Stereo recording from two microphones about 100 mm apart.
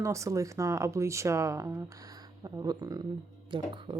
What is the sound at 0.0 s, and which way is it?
Speech, 30° right (ahead or behind).